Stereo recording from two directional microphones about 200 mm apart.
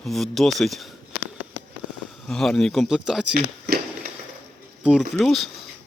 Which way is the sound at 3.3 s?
50° right (ahead or behind).